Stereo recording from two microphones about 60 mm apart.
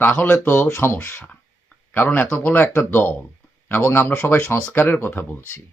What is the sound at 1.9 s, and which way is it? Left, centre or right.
Speech, left.